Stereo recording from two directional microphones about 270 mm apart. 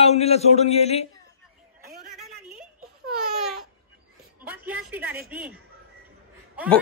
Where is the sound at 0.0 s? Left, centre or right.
Left.